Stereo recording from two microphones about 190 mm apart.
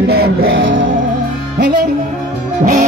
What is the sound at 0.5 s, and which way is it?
Music, 90° right.